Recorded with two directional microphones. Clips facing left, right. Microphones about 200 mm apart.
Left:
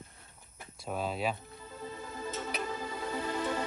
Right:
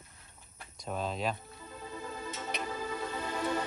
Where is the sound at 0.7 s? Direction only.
5° left (ahead or behind).